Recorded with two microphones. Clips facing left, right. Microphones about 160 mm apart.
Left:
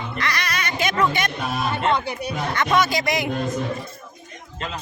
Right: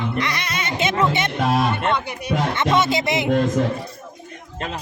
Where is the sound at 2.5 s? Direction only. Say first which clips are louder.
Even; 25° right (ahead or behind).